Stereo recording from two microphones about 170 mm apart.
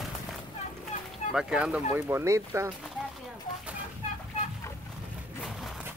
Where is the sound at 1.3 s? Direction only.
5° right (ahead or behind).